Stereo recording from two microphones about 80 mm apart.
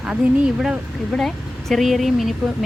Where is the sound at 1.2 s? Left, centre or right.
Centre.